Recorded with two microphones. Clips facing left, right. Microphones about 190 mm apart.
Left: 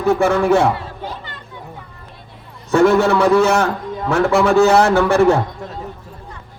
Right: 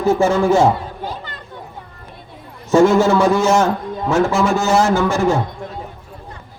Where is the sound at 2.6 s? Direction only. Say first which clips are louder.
Right 1 dB; 60° left (ahead or behind).